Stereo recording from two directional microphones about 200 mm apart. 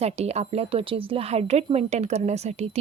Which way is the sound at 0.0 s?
30° right (ahead or behind).